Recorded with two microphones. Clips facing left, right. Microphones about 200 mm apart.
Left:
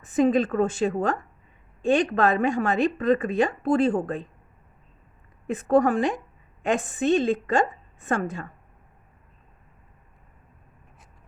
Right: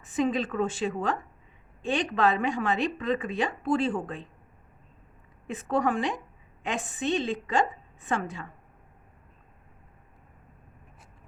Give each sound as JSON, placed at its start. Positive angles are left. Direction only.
{"t": 0.0, "sound": "a woman's voice", "side_deg": 45}
{"t": 5.5, "sound": "a woman's voice", "side_deg": 45}